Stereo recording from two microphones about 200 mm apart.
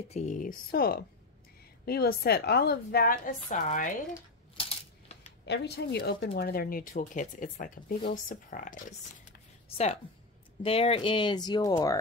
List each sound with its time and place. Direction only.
0.1 s a woman's voice: 35° left (ahead or behind)
4.6 s coin: 30° left (ahead or behind)
5.4 s speech: 55° left (ahead or behind); by 8.8 s 40° left (ahead or behind)
10.6 s speech: 30° left (ahead or behind)